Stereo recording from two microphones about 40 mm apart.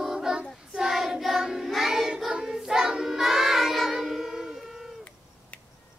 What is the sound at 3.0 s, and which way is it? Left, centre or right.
Music, centre.